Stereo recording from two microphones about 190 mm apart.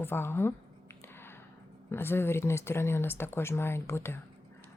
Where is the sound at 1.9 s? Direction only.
10° left (ahead or behind).